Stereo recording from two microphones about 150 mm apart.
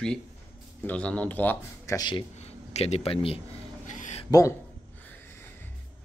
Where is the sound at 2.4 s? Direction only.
45° left (ahead or behind).